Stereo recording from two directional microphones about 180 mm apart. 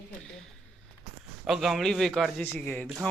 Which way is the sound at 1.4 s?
Centre (ahead or behind).